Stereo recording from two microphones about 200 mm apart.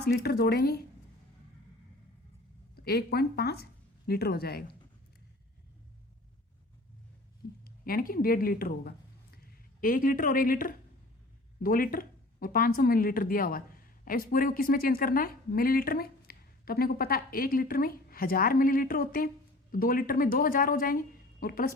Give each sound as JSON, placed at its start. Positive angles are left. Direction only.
{"t": 0.0, "sound": "speech", "side_deg": 55}
{"t": 2.7, "sound": "speech", "side_deg": 50}
{"t": 7.6, "sound": "a woman's voice", "side_deg": 45}